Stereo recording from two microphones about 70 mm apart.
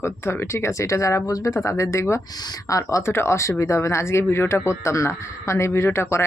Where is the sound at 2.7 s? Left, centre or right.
Left.